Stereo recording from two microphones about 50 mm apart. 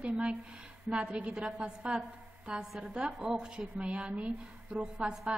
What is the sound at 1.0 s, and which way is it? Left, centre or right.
Speech, right.